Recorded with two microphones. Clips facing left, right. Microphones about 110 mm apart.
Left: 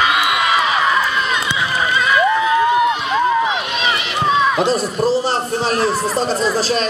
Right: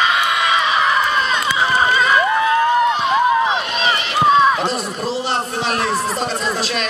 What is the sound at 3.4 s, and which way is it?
Run, 35° right (ahead or behind).